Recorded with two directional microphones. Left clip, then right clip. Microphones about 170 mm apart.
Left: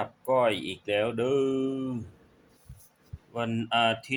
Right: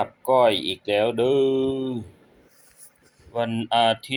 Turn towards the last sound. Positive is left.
turn(degrees=-10)  # may be behind; listen again after turning